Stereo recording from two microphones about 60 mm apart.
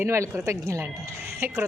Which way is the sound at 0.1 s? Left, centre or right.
Right.